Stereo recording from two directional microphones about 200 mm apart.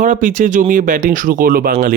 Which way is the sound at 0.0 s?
40° right (ahead or behind).